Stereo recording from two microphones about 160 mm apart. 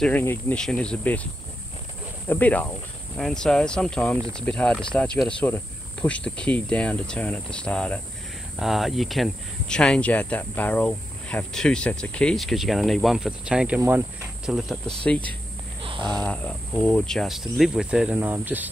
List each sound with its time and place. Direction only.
0.0 s speech: 10° left (ahead or behind)
2.2 s speech: 10° left (ahead or behind)
15.8 s a sound: 30° right (ahead or behind)
16.1 s speech: 10° left (ahead or behind); by 18.7 s 10° right (ahead or behind)